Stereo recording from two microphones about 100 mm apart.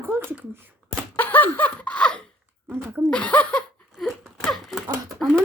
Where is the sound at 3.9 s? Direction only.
Centre (ahead or behind).